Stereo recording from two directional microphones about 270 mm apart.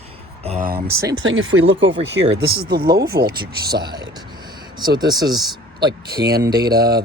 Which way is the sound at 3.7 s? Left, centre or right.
Centre.